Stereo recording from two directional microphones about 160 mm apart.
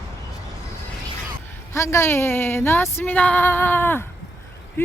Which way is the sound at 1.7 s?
15° left (ahead or behind).